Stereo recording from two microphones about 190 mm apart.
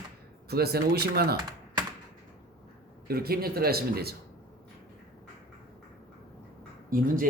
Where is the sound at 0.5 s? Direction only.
55° right (ahead or behind).